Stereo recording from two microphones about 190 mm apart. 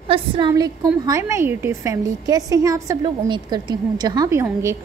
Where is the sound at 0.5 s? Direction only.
20° right (ahead or behind).